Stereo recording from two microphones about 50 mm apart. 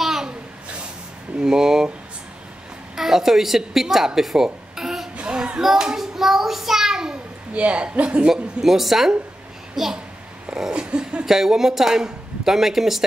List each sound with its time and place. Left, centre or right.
0.0 s a sound: centre
1.4 s speech: centre
3.0 s speech: centre
5.1 s child singing: right
5.6 s child singing: centre
7.5 s speech: right
8.3 s a woman's voice: centre
10.5 s a sound: centre
11.2 s speech: centre